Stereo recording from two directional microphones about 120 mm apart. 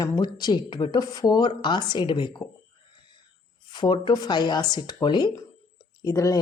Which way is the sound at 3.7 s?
40° left (ahead or behind).